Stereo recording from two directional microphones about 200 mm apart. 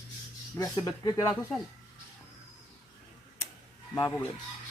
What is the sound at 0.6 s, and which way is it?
Speech, 20° left (ahead or behind).